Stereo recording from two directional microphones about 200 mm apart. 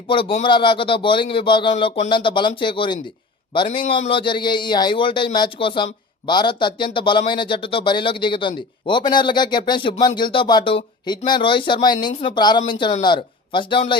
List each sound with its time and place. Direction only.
0.1 s a man's voice: 25° left (ahead or behind)